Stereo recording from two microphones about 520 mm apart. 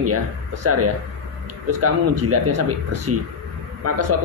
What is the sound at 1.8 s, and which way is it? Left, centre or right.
Speech, right.